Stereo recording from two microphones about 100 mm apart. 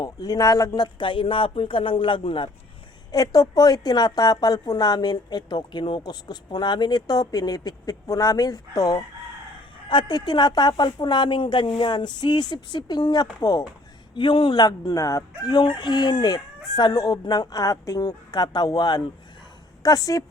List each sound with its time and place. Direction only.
0.0 s speech: 40° left (ahead or behind); by 2.5 s 60° left (ahead or behind)
3.1 s a woman's voice: 35° left (ahead or behind)
14.2 s speech: 60° left (ahead or behind)
14.6 s a woman's voice: 40° left (ahead or behind)